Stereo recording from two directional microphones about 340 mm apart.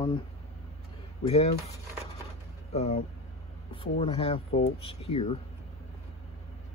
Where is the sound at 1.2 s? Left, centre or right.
Centre.